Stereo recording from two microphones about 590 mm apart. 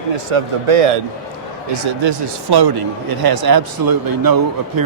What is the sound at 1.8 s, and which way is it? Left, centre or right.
Speech, right.